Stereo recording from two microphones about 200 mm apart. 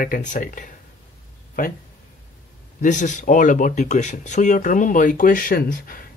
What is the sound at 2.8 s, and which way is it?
Speech, 40° left (ahead or behind).